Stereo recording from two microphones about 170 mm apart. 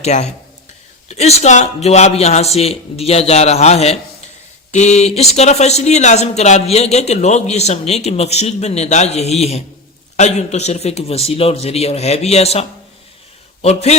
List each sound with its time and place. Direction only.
0.0 s speech: 40° left (ahead or behind)